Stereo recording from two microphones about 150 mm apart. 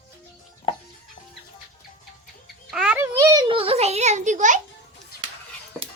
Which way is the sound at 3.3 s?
30° right (ahead or behind).